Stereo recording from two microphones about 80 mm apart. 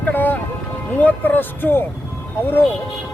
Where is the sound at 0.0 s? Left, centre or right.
Left.